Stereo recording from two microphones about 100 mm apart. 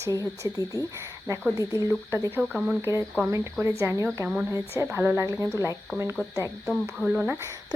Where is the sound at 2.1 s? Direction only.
20° right (ahead or behind).